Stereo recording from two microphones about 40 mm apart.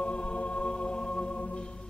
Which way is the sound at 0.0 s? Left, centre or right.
Left.